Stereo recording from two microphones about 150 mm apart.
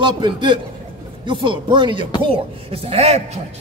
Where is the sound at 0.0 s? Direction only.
30° right (ahead or behind).